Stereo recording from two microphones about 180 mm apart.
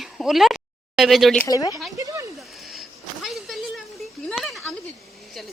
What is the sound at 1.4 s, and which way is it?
Speech, 20° left (ahead or behind).